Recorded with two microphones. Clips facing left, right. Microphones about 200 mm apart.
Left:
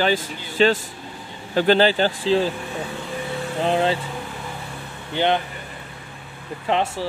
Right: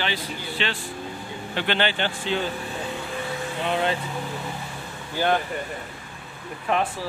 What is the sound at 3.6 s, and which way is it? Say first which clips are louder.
Speech: left 5 dB; 30° left (ahead or behind).